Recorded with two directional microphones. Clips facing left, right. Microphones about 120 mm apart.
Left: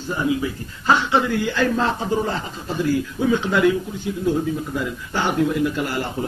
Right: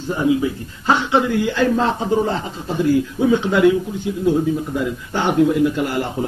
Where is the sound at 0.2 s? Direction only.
20° right (ahead or behind).